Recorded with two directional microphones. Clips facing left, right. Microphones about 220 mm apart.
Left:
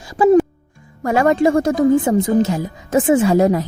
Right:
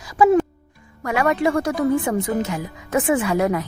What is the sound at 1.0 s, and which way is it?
A woman's voice, 30° left (ahead or behind).